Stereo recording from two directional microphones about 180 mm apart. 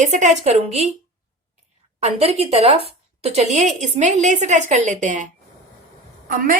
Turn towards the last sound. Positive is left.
turn(degrees=-50)  # may be behind; listen again after turning